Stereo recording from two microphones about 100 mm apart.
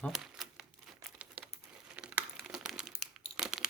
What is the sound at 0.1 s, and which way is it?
Crumpling, 5° right (ahead or behind).